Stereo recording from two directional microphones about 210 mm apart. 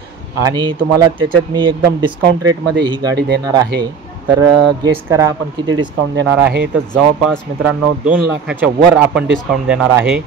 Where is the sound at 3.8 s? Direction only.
20° right (ahead or behind).